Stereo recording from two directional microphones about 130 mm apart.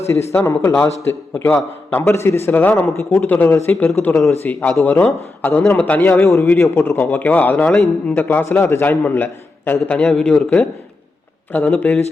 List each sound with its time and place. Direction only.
0.3 s a man's voice: 15° left (ahead or behind)